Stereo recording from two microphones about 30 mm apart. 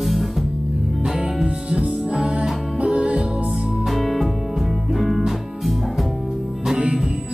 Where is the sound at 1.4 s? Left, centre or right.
Right.